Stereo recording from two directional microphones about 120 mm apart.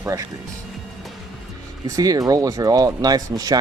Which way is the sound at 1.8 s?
30° right (ahead or behind).